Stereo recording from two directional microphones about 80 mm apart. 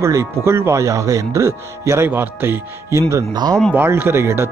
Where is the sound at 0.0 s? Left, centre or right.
Right.